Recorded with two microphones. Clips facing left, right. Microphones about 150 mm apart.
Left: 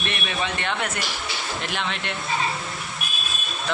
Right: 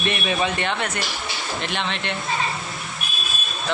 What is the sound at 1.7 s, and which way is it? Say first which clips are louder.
Speech: right 2 dB; 5° left (ahead or behind).